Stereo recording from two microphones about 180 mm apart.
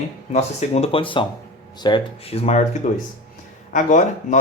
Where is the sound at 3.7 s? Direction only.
45° left (ahead or behind).